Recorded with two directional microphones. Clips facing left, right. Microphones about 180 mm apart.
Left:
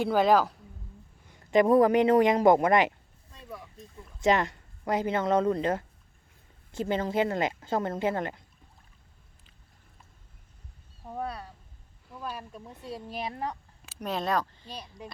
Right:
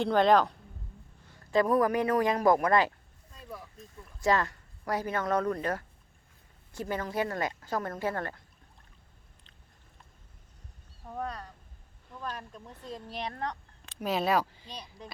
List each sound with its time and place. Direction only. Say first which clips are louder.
0.0 s speech: even; 5° left (ahead or behind)
1.3 s speech: left 4 dB; 20° left (ahead or behind)
3.9 s speech: left 3 dB; 20° left (ahead or behind)
11.0 s speech: left 2 dB; 10° left (ahead or behind); by 14.7 s 10° right (ahead or behind)
14.7 s speech: left 3 dB; 5° left (ahead or behind)